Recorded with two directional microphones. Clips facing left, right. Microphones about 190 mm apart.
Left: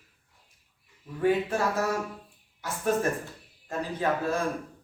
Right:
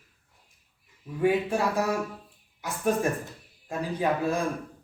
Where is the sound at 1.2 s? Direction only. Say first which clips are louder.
Right 1 dB; 15° right (ahead or behind).